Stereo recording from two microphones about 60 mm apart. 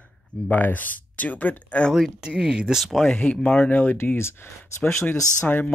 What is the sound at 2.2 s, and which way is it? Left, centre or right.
Speech, centre.